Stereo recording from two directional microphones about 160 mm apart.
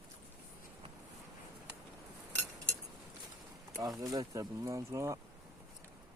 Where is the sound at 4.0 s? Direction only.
20° right (ahead or behind).